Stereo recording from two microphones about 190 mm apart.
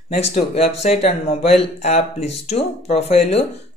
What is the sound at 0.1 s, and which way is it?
Speech, 35° left (ahead or behind).